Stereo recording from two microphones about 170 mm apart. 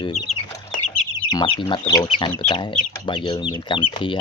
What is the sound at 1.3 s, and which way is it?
Speech, 30° left (ahead or behind).